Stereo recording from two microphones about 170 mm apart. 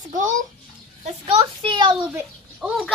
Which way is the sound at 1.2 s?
35° right (ahead or behind).